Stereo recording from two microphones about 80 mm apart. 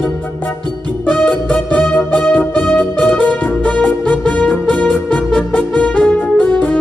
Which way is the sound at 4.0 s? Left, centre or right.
Centre.